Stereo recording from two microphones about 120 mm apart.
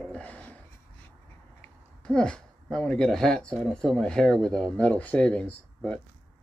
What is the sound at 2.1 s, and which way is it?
Speech, 5° left (ahead or behind).